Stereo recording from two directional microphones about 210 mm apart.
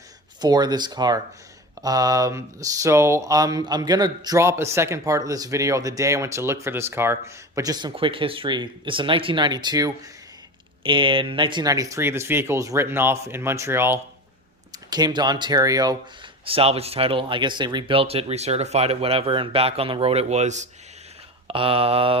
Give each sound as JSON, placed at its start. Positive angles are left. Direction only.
{"t": 0.4, "sound": "speech", "side_deg": -20}
{"t": 16.5, "sound": "speech", "side_deg": -30}